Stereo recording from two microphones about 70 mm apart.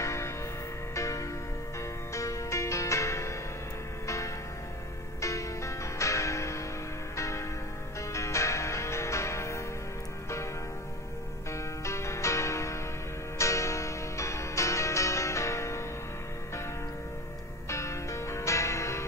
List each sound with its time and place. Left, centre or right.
0.0 s music: left
5.2 s music: left
11.5 s music: left
17.6 s music: left